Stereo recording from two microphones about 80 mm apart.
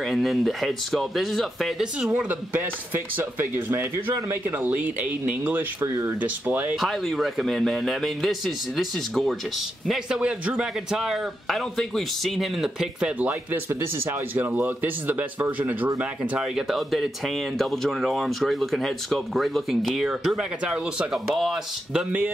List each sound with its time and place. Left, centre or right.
0.0 s speech: centre
2.1 s speech: right
6.8 s speech: centre
10.0 s speech: centre
13.2 s speech: right
16.0 s speech: centre